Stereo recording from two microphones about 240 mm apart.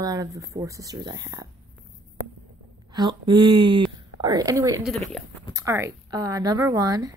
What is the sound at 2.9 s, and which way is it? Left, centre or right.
Speech, centre.